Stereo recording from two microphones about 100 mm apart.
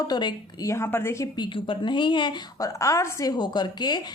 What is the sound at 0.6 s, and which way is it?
Speech, 25° left (ahead or behind).